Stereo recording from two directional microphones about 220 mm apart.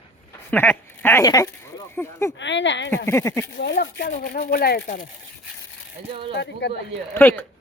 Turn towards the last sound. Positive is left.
turn(degrees=10)  # may be behind; listen again after turning